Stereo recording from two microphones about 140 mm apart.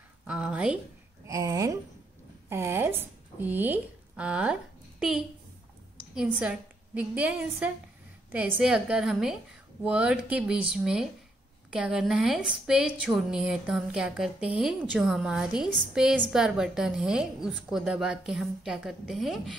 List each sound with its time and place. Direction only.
0.3 s a woman's voice: 5° right (ahead or behind)
1.2 s speech: 25° right (ahead or behind); by 4.6 s 10° right (ahead or behind)
6.1 s a woman's voice: 10° right (ahead or behind)